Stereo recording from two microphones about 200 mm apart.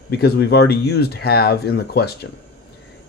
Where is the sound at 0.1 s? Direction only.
55° left (ahead or behind).